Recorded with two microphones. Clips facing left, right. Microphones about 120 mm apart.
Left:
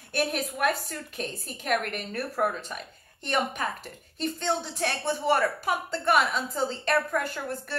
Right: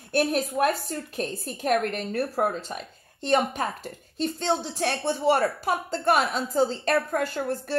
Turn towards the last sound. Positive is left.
turn(degrees=-40)  # may be behind; listen again after turning